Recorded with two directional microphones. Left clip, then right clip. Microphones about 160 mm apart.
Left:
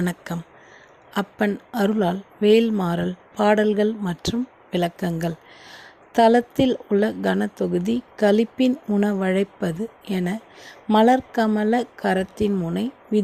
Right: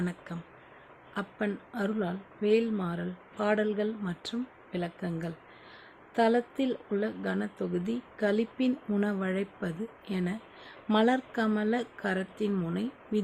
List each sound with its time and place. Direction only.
0.0 s speech: 50° left (ahead or behind); by 13.2 s 35° left (ahead or behind)